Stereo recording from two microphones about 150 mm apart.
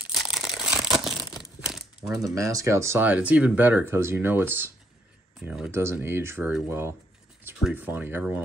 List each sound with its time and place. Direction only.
0.1 s a sound: 5° right (ahead or behind)
1.2 s crumpling: centre (ahead or behind)
2.1 s speech: 20° right (ahead or behind)
7.6 s speech: 10° right (ahead or behind)